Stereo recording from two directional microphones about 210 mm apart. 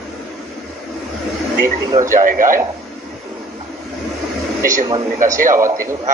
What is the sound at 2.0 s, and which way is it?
Speech, 40° right (ahead or behind).